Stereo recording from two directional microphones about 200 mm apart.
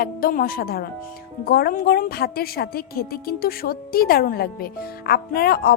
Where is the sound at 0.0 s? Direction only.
45° left (ahead or behind).